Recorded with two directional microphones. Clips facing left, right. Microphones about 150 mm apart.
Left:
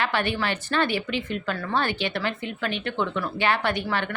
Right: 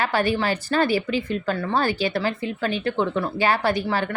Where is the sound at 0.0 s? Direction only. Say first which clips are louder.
Right 4 dB; 40° right (ahead or behind).